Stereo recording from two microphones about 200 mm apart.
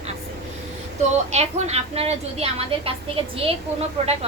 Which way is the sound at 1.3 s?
35° right (ahead or behind).